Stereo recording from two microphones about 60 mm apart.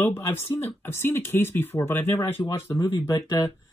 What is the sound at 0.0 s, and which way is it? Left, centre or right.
Speech, left.